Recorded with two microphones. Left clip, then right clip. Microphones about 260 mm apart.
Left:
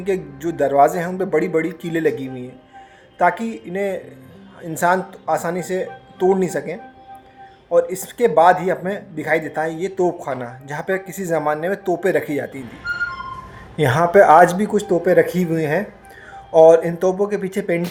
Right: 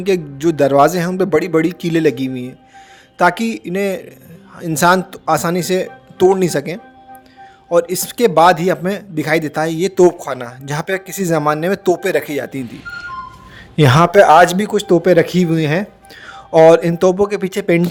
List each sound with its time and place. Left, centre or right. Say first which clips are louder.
0.0 s speech: right 6 dB; right
7.8 s speech: right 3 dB; right
9.4 s speech: right 5 dB; right
10.2 s speech: right 2 dB; right
13.7 s speech: right 3 dB; right
14.9 s speech: right 4 dB; right
16.5 s speech: right 2 dB; right